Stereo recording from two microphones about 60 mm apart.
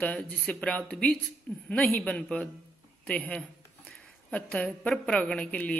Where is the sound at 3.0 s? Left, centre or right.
Centre.